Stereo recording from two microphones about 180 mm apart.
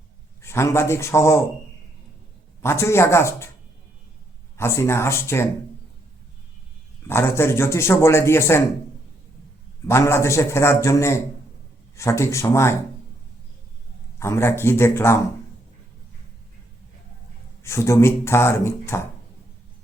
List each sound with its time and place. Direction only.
0.4 s a man's voice: 15° left (ahead or behind)
2.6 s a man's voice: 15° left (ahead or behind)
4.5 s a man's voice: 15° left (ahead or behind)
7.1 s a man's voice: 15° left (ahead or behind)
9.8 s a man's voice: 15° left (ahead or behind)
14.2 s a man's voice: 15° left (ahead or behind)
17.6 s a man's voice: 15° left (ahead or behind)